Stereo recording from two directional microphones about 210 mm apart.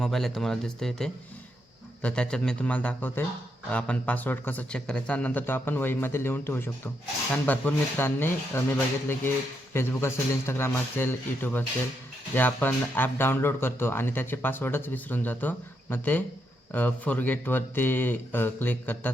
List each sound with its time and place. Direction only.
0.0 s speech: centre (ahead or behind)
9.7 s speech: 10° left (ahead or behind)